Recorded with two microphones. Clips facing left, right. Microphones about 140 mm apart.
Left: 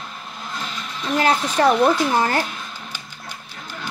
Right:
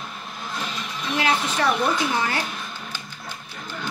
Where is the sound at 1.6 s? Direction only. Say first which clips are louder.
Left 7 dB; 40° left (ahead or behind).